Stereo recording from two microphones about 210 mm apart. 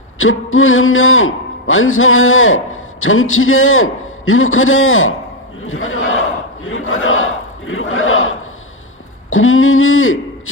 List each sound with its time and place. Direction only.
0.2 s a man's voice: 70° left (ahead or behind)